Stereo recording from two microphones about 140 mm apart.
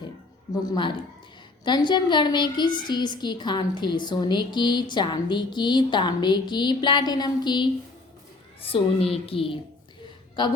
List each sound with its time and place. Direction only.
0.7 s a woman's voice: 35° left (ahead or behind)
8.7 s a woman's voice: 45° left (ahead or behind)